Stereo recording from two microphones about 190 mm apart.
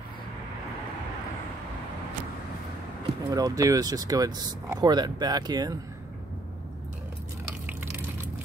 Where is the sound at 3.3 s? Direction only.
20° right (ahead or behind).